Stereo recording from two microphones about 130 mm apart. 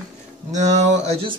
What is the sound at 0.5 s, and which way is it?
Speech, 60° right (ahead or behind).